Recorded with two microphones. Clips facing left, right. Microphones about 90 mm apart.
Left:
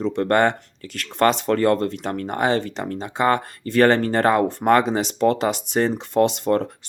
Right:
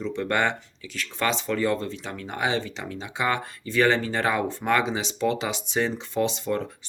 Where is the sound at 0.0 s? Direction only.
50° left (ahead or behind).